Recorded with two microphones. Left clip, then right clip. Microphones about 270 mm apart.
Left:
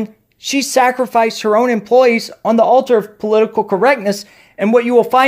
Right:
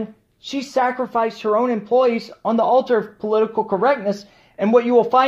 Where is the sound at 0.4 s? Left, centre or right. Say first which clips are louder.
Left 7 dB; left.